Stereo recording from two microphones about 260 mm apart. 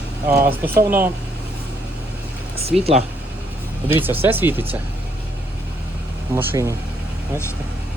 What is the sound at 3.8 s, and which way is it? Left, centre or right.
Speech, centre.